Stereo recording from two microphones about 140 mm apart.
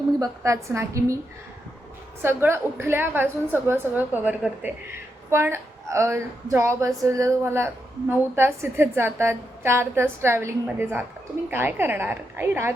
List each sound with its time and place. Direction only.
0.2 s speech: 20° right (ahead or behind)
2.2 s a woman's voice: 15° right (ahead or behind)